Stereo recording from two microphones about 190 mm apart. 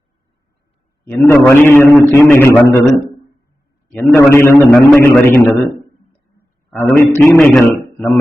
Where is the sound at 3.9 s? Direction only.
10° left (ahead or behind).